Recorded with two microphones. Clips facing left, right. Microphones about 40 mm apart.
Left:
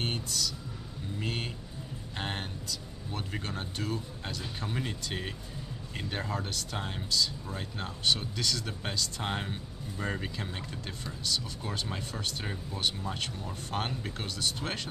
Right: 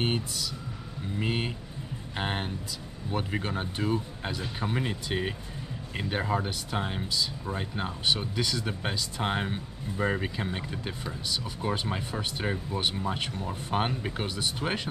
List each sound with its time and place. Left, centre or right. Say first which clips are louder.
0.0 s speech: right 4 dB; centre